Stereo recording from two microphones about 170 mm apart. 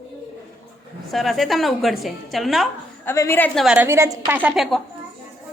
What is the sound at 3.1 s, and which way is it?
Speech, 15° left (ahead or behind).